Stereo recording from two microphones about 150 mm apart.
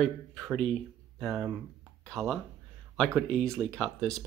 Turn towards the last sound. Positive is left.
turn(degrees=5)  # may be behind; listen again after turning